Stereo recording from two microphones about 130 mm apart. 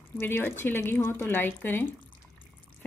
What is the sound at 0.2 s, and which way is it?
Speech, 15° left (ahead or behind).